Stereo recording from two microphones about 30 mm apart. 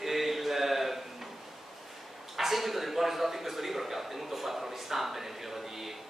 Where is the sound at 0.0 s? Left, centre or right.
Centre.